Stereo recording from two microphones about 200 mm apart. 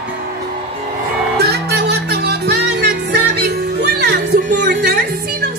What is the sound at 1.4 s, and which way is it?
Music, 55° right (ahead or behind).